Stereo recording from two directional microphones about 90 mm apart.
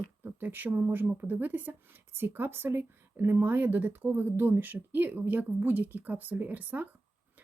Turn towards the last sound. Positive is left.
turn(degrees=-20)  # may be behind; listen again after turning